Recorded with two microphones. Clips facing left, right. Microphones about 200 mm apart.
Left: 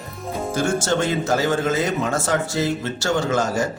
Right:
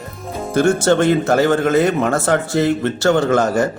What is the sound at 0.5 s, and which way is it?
Speech, 60° right (ahead or behind).